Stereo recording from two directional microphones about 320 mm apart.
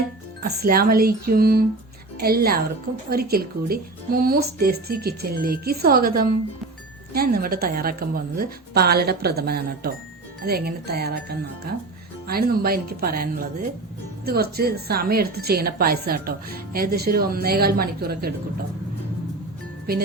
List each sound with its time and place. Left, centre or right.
0.4 s speech: right